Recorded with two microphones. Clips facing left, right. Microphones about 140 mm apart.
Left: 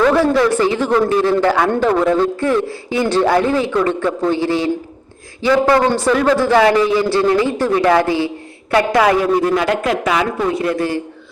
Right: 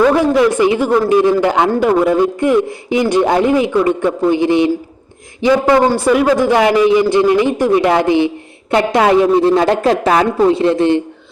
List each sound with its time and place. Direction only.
0.0 s a man's voice: 15° right (ahead or behind)